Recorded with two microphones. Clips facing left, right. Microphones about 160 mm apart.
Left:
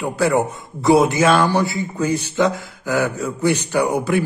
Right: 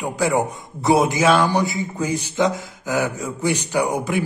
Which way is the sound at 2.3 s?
15° right (ahead or behind).